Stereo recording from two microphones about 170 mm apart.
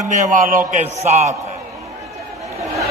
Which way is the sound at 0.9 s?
40° right (ahead or behind).